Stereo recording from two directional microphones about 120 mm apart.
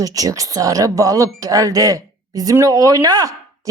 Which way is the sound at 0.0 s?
30° right (ahead or behind).